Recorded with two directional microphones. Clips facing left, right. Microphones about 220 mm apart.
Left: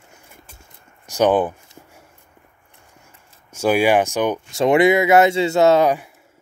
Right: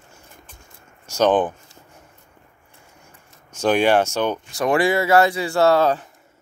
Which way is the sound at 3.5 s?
10° left (ahead or behind).